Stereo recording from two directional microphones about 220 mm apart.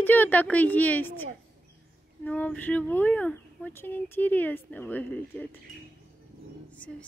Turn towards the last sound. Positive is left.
turn(degrees=5)  # may be behind; listen again after turning